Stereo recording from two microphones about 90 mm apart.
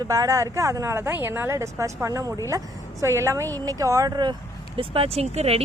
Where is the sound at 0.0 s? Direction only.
40° right (ahead or behind).